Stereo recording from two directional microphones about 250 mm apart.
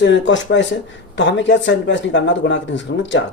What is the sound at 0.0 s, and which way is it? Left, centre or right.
Speech, left.